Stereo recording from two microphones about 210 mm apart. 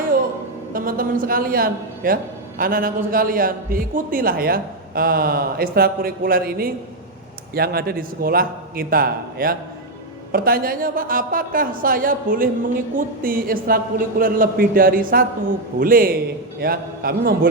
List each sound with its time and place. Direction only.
0.7 s a man's voice: 40° right (ahead or behind)